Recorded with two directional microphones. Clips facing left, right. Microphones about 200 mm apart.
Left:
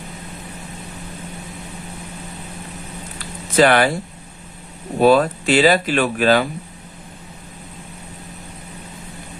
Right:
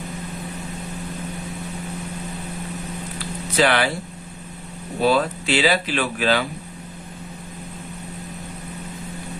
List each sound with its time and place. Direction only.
3.5 s speech: 50° left (ahead or behind)
4.9 s speech: 50° left (ahead or behind)